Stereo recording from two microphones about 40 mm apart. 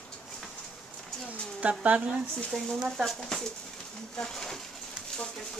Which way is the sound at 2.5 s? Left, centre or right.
Centre.